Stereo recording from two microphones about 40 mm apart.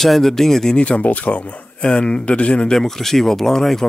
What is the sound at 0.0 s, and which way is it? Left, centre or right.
Speech, centre.